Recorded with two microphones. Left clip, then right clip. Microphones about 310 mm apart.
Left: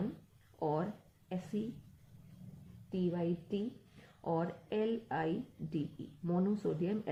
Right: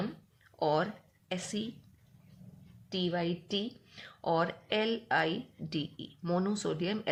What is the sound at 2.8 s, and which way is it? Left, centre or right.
Speech, right.